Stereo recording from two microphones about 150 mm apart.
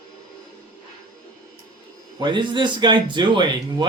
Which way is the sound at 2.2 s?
30° right (ahead or behind).